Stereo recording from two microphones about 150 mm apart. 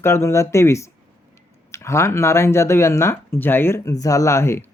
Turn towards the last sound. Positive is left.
turn(degrees=15)  # may be behind; listen again after turning